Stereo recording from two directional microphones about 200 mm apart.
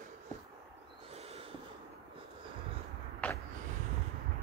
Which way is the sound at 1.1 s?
30° right (ahead or behind).